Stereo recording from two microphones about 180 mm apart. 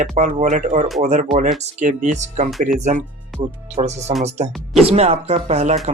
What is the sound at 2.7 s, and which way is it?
Speech, 40° right (ahead or behind).